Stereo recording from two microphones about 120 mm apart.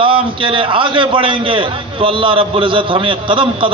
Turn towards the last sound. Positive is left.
turn(degrees=-45)  # may be behind; listen again after turning